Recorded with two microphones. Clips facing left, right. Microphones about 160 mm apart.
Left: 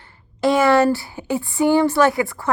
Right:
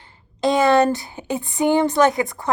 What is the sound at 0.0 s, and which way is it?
A woman's voice, 15° right (ahead or behind).